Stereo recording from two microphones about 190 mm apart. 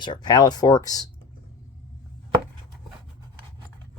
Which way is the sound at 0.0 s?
25° left (ahead or behind).